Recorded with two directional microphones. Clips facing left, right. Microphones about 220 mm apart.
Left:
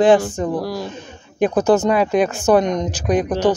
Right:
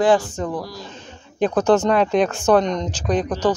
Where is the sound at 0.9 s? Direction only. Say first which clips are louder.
Left 4 dB; 10° left (ahead or behind).